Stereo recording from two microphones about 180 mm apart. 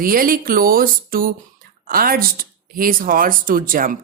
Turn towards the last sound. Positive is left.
turn(degrees=-50)  # may be behind; listen again after turning